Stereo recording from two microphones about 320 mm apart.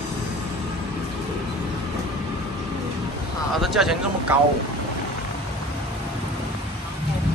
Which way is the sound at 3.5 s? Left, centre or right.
Centre.